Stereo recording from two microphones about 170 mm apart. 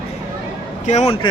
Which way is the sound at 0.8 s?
40° left (ahead or behind).